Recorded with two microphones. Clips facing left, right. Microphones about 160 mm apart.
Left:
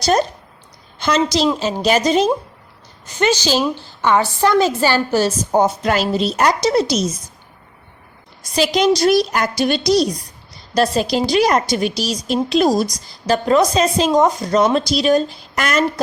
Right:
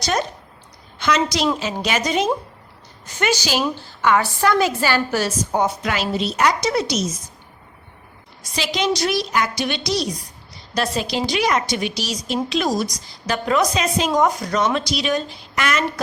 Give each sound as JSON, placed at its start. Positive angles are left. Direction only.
{"t": 0.0, "sound": "a woman's voice", "side_deg": 35}
{"t": 4.0, "sound": "a woman's voice", "side_deg": 25}
{"t": 8.5, "sound": "a woman's voice", "side_deg": 40}
{"t": 14.1, "sound": "a woman's voice", "side_deg": 25}